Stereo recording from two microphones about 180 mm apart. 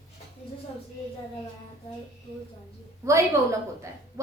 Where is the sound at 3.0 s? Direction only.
15° right (ahead or behind).